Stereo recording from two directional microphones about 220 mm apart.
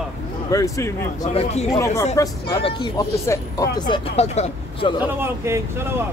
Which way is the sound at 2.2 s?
15° left (ahead or behind).